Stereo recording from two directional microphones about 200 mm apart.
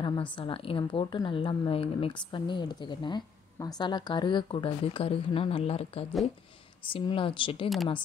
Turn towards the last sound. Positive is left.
turn(degrees=0)  # may be behind; listen again after turning